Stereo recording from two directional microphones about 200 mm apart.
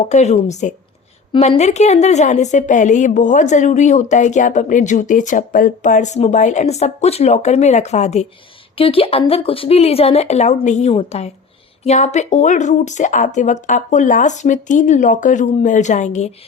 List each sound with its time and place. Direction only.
0.1 s a woman's voice: 35° left (ahead or behind)